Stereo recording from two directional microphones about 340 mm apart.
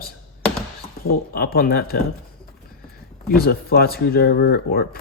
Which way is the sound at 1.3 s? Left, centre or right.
Left.